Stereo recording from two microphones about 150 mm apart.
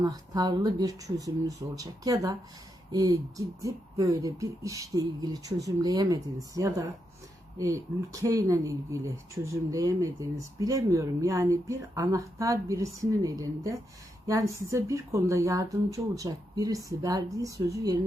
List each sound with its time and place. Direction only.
0.0 s speech: 25° right (ahead or behind)